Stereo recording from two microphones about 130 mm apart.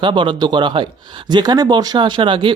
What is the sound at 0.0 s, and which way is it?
Speech, 40° right (ahead or behind).